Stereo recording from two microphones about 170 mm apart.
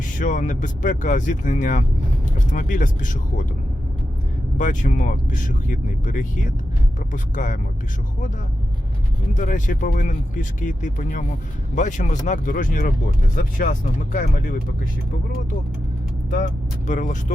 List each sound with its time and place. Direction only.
0.2 s speech: 50° left (ahead or behind)
4.5 s speech: 50° left (ahead or behind)
9.3 s speech: 50° left (ahead or behind)
16.3 s speech: 45° left (ahead or behind)